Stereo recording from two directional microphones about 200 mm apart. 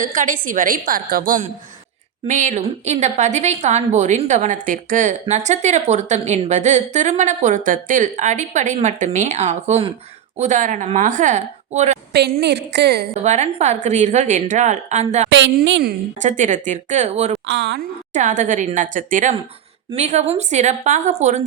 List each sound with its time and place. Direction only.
0.0 s a woman's voice: 40° right (ahead or behind)
12.1 s a woman's voice: 55° right (ahead or behind)
13.2 s a woman's voice: 35° right (ahead or behind)
15.3 s a woman's voice: 65° right (ahead or behind)
16.2 s a woman's voice: 40° right (ahead or behind)
17.4 s a woman's voice: 65° right (ahead or behind)
18.1 s a woman's voice: 40° right (ahead or behind)